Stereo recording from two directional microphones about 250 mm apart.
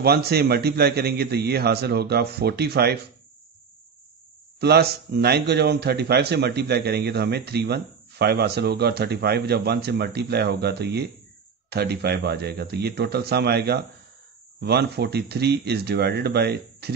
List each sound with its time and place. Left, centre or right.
0.0 s a man's voice: right
4.6 s a man's voice: right